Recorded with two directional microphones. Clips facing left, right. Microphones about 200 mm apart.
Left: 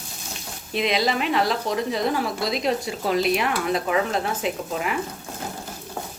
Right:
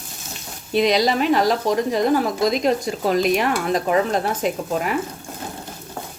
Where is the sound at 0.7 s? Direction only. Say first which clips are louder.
Right 5 dB; 40° right (ahead or behind).